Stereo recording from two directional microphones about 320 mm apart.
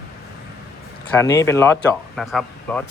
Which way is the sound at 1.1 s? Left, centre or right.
Centre.